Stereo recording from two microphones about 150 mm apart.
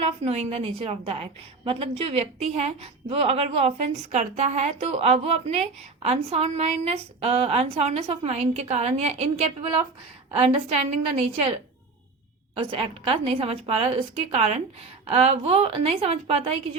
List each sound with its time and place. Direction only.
0.0 s a woman's voice: 45° right (ahead or behind)
12.7 s a woman's voice: 40° right (ahead or behind)